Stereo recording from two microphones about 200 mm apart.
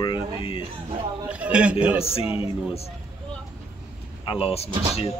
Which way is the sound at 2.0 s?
30° left (ahead or behind).